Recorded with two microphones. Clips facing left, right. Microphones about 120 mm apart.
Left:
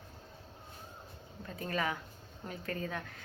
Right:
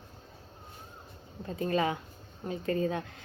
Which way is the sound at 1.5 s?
25° right (ahead or behind).